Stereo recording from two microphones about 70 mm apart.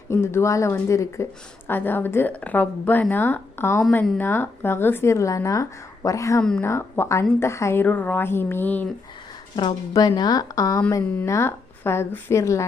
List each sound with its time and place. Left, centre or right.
0.1 s a woman's voice: left
1.6 s speech: left
5.1 s a woman's voice: left
6.6 s speech: left
7.8 s speech: left
9.6 s speech: left
11.3 s speech: left